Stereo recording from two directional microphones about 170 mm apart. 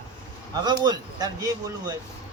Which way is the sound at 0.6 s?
25° right (ahead or behind).